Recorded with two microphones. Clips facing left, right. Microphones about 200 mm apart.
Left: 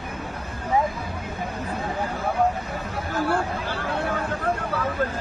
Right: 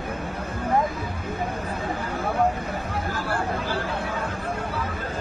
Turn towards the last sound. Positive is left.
turn(degrees=55)  # may be behind; listen again after turning